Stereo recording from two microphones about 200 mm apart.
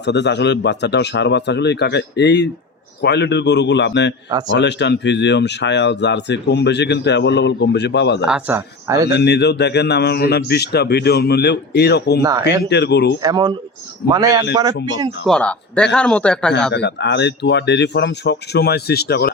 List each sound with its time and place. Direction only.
0.0 s speech: 60° left (ahead or behind)
8.3 s speech: 10° right (ahead or behind)
9.1 s speech: 55° left (ahead or behind)
12.2 s speech: 15° right (ahead or behind)
12.6 s speech: 55° left (ahead or behind)
13.2 s speech: 20° right (ahead or behind)
15.3 s speech: 5° left (ahead or behind)
16.7 s speech: 60° left (ahead or behind)